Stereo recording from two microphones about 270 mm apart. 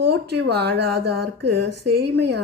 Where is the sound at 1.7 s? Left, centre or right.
Right.